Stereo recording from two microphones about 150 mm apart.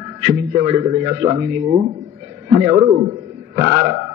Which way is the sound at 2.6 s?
45° right (ahead or behind).